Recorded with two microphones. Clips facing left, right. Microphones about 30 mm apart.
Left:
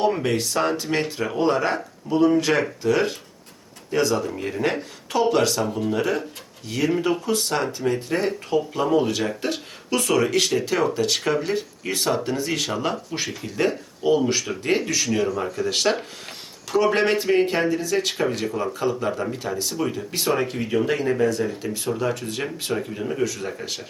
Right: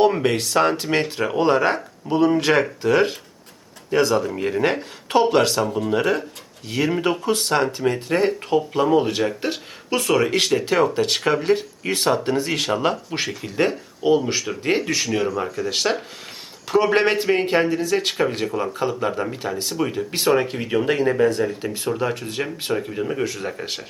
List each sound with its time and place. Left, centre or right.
0.0 s speech: right
4.2 s speech: right
9.2 s speech: centre
14.3 s speech: centre
14.8 s speech: right
15.5 s speech: centre
16.6 s speech: right
20.1 s speech: right
21.6 s speech: right